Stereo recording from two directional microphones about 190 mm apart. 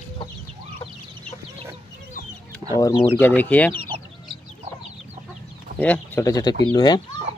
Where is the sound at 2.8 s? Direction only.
20° left (ahead or behind).